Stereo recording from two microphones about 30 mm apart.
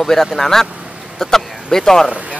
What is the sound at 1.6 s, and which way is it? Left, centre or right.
Speech, centre.